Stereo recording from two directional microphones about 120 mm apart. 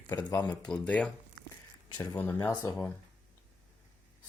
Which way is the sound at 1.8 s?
35° left (ahead or behind).